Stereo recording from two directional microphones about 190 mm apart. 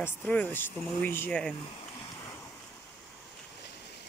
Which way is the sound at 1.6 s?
25° left (ahead or behind).